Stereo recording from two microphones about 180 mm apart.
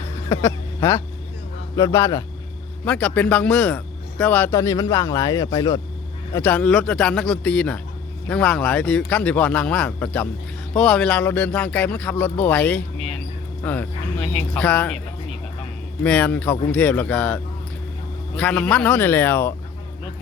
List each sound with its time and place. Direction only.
0.3 s speech: 15° left (ahead or behind)
2.8 s speech: 5° left (ahead or behind)
6.3 s a man's voice: 10° left (ahead or behind)
16.0 s speech: 5° left (ahead or behind)